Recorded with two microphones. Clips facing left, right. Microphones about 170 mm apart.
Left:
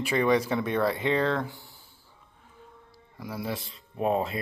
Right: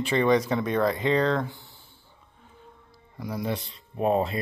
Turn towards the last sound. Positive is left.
turn(degrees=0)  # may be behind; listen again after turning